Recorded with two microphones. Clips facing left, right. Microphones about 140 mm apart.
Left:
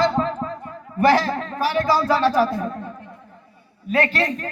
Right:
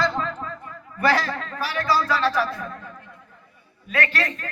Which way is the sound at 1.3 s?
30° left (ahead or behind).